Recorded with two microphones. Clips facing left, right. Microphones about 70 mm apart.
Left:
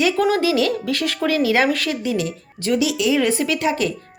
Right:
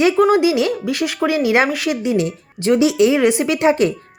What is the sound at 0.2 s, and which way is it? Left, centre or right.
Speech, centre.